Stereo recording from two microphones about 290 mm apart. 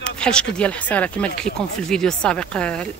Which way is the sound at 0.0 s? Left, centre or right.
Centre.